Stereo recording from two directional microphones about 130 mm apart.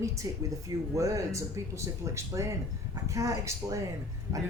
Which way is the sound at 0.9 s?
25° right (ahead or behind).